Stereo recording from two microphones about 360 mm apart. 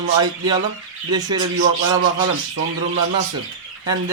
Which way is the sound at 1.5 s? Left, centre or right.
Right.